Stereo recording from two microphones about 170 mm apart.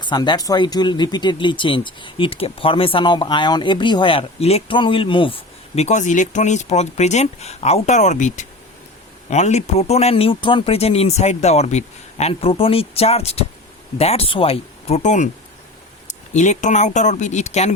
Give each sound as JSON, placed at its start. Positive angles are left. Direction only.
{"t": 0.0, "sound": "speech", "side_deg": 25}